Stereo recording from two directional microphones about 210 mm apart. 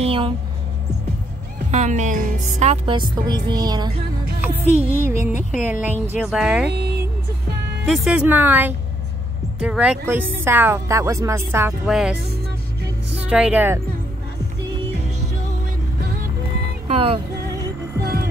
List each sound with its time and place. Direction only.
0.0 s a sound: 25° right (ahead or behind)
1.7 s a woman's voice: 35° right (ahead or behind); by 6.7 s 5° right (ahead or behind)
7.8 s speech: centre (ahead or behind)
16.8 s music: 25° right (ahead or behind)
18.0 s music: 50° right (ahead or behind)